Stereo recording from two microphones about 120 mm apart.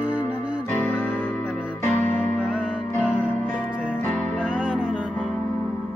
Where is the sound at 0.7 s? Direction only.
15° left (ahead or behind).